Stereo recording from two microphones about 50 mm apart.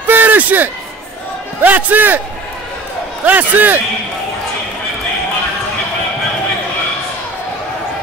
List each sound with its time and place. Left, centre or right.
0.0 s a sound: right
1.6 s a man's voice: right
3.3 s a man's voice: right